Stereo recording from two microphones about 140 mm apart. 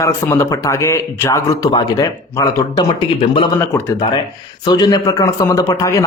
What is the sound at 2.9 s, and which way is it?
Speech, 35° left (ahead or behind).